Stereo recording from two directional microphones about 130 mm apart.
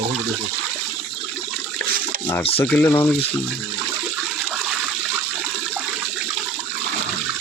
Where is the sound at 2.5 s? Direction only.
15° left (ahead or behind).